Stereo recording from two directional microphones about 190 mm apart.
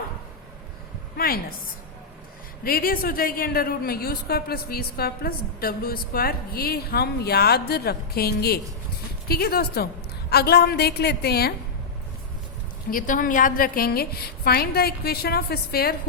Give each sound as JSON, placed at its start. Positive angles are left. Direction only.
{"t": 1.1, "sound": "a woman's voice", "side_deg": 50}
{"t": 2.6, "sound": "a woman's voice", "side_deg": 50}
{"t": 12.9, "sound": "a woman's voice", "side_deg": 45}